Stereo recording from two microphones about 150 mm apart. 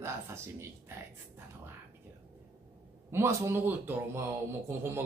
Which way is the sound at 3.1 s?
15° right (ahead or behind).